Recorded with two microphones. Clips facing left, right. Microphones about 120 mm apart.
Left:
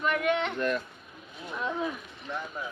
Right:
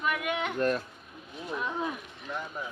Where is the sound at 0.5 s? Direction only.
40° right (ahead or behind).